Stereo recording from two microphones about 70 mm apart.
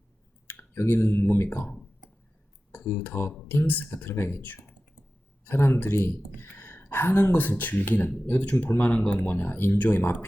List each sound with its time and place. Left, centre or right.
0.4 s speech: left
2.7 s speech: left
3.7 s speech: left
5.5 s speech: left
9.3 s speech: left